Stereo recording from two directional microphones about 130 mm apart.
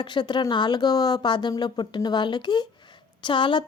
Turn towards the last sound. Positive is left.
turn(degrees=40)  # may be behind; listen again after turning